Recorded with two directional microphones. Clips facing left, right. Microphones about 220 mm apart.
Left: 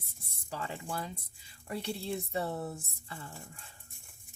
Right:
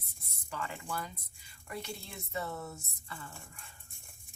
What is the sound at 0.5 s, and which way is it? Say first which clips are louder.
Speech: left 1 dB; 30° left (ahead or behind).